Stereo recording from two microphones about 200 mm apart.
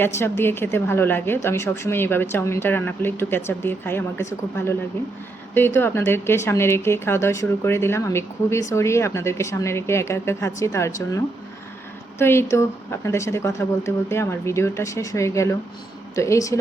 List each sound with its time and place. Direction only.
0.0 s a woman's voice: 10° left (ahead or behind)
5.5 s a woman's voice: 10° left (ahead or behind)
12.2 s a woman's voice: 10° left (ahead or behind)